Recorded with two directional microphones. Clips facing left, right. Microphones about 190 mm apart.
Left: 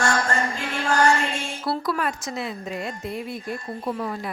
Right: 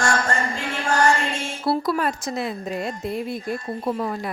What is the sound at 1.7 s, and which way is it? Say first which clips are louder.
A woman's voice: right 4 dB; 30° right (ahead or behind).